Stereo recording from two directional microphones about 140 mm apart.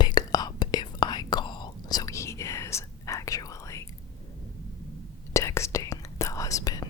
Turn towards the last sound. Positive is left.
turn(degrees=25)  # may be behind; listen again after turning